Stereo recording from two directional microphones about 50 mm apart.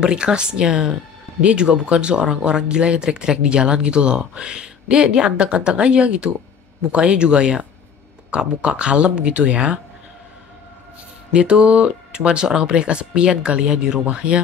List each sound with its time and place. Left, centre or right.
0.0 s speech: centre
11.3 s speech: right